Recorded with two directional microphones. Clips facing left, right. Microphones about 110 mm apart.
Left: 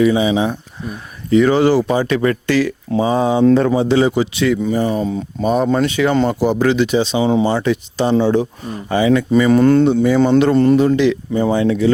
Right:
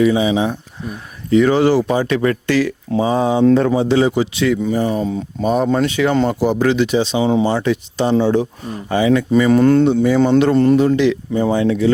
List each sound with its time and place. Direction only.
0.0 s speech: 20° left (ahead or behind)
6.7 s speech: 20° left (ahead or behind)